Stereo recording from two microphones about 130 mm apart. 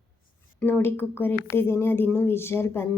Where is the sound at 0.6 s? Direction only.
15° left (ahead or behind).